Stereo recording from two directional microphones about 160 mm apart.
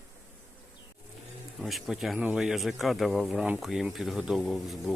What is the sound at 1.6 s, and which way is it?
Speech, centre (ahead or behind).